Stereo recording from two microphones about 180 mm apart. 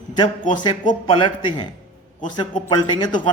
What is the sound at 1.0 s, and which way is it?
Speech, 25° left (ahead or behind).